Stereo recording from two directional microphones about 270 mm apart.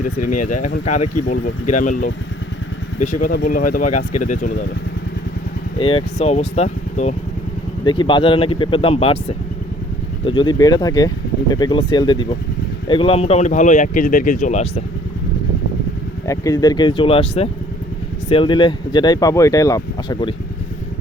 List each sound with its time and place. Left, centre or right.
0.0 s speech: left
5.8 s speech: centre
10.2 s speech: centre
16.2 s speech: centre